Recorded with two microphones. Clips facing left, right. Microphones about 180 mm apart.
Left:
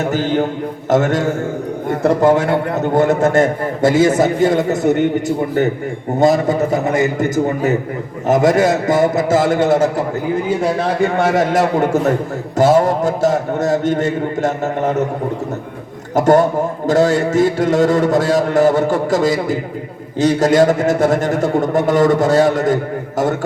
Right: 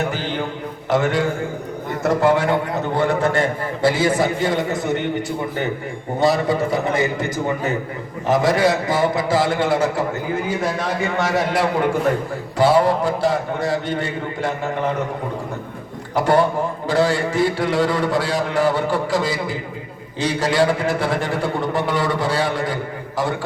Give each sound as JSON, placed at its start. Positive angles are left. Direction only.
{"t": 0.0, "sound": "a man's voice", "side_deg": 45}
{"t": 6.1, "sound": "a man's voice", "side_deg": 45}
{"t": 11.2, "sound": "a man's voice", "side_deg": 50}
{"t": 16.1, "sound": "a man's voice", "side_deg": 45}